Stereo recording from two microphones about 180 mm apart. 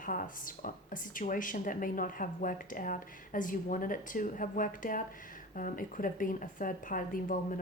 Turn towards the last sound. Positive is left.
turn(degrees=50)  # may be behind; listen again after turning